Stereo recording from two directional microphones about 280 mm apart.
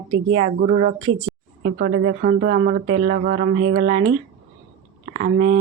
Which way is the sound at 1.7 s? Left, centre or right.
Right.